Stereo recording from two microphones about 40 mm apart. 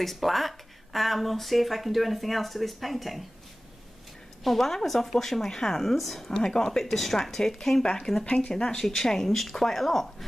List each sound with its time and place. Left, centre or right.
0.0 s speech: centre
4.5 s speech: centre
6.3 s speech: centre
8.8 s speech: centre